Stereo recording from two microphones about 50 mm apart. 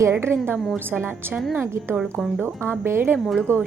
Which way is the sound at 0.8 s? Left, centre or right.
Right.